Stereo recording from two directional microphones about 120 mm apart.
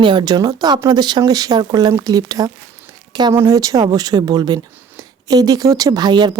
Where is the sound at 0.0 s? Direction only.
40° right (ahead or behind).